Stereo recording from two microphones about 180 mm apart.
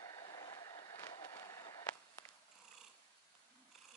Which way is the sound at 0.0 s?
20° left (ahead or behind).